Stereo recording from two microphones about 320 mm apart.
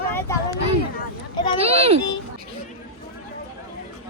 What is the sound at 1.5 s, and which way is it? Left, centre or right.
Speech, centre.